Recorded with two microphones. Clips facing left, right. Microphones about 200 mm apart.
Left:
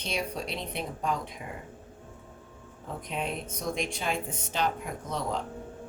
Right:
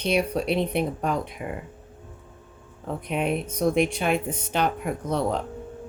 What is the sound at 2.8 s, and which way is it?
Speech, 65° right (ahead or behind).